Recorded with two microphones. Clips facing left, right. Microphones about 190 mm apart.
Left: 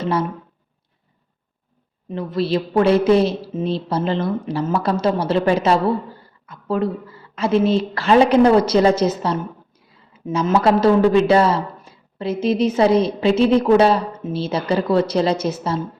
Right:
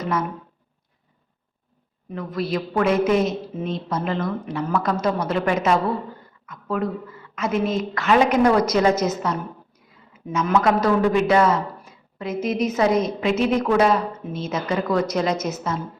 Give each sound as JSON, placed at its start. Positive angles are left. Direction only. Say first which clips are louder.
{"t": 0.0, "sound": "speech", "louder": "left 4 dB", "side_deg": 30}
{"t": 2.0, "sound": "a woman's voice", "louder": "left 5 dB", "side_deg": 30}